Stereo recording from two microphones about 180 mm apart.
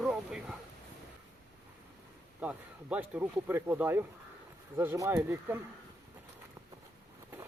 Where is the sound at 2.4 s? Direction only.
10° right (ahead or behind).